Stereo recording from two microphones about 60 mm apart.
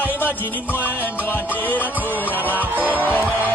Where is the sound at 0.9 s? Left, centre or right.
Left.